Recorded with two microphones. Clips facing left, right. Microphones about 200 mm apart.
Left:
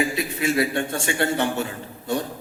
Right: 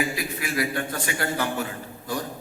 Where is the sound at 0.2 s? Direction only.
25° left (ahead or behind).